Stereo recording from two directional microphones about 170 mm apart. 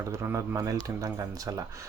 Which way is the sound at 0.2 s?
15° right (ahead or behind).